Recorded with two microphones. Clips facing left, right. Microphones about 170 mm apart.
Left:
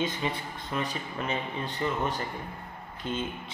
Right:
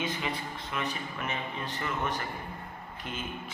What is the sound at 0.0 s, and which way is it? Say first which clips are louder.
A man's voice: left 3 dB; 35° left (ahead or behind).